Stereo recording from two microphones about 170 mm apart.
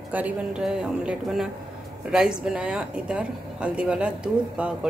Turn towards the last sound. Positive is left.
turn(degrees=-5)  # may be behind; listen again after turning